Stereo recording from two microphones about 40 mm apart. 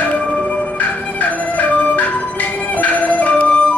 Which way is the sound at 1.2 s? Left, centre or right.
Left.